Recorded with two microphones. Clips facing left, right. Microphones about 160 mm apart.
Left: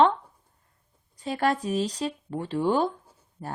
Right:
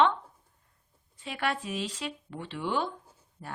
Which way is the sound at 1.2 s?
40° left (ahead or behind).